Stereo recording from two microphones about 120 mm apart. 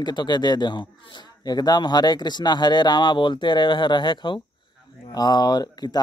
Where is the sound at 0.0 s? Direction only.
35° left (ahead or behind).